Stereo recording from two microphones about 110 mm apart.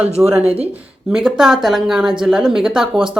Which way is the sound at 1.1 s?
5° right (ahead or behind).